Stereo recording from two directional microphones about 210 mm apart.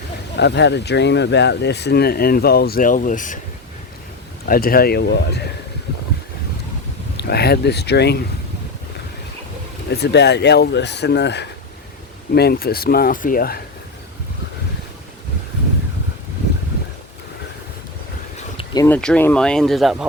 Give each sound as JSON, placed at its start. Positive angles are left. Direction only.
{"t": 0.3, "sound": "speech", "side_deg": 55}
{"t": 4.4, "sound": "speech", "side_deg": 45}
{"t": 7.2, "sound": "speech", "side_deg": 50}
{"t": 9.9, "sound": "speech", "side_deg": 50}
{"t": 18.5, "sound": "a sound", "side_deg": 20}
{"t": 18.9, "sound": "speech", "side_deg": 5}